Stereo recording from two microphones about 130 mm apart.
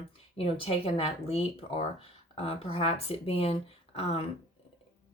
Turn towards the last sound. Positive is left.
turn(degrees=50)  # may be behind; listen again after turning